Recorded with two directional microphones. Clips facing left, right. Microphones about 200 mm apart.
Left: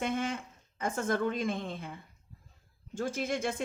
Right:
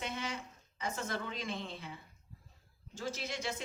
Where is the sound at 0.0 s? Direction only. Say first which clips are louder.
Left 8 dB; 50° left (ahead or behind).